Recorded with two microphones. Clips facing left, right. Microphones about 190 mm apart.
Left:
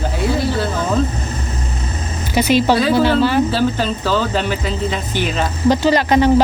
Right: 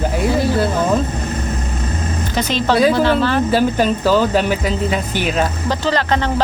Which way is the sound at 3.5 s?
15° right (ahead or behind).